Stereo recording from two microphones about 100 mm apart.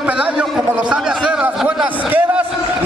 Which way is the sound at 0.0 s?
10° right (ahead or behind).